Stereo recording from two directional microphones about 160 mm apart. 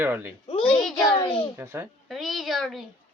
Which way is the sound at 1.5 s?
15° right (ahead or behind).